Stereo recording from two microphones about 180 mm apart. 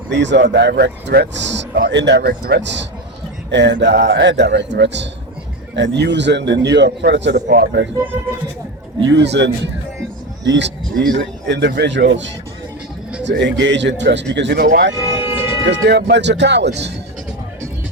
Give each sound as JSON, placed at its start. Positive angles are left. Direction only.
{"t": 0.1, "sound": "speech", "side_deg": -75}
{"t": 9.0, "sound": "speech", "side_deg": -75}
{"t": 15.1, "sound": "music", "side_deg": -10}
{"t": 15.7, "sound": "speech", "side_deg": -70}